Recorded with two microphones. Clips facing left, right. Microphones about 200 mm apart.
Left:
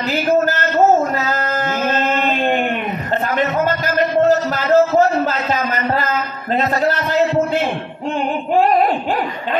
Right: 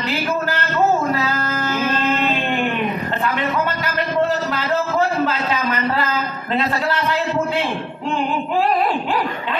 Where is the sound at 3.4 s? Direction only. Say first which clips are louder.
Left 4 dB; 45° left (ahead or behind).